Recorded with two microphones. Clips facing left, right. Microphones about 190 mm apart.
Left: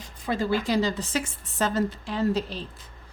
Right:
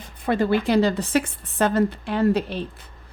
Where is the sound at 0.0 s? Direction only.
60° right (ahead or behind).